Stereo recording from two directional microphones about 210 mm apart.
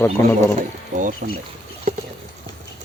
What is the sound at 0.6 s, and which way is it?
Speech, 40° right (ahead or behind).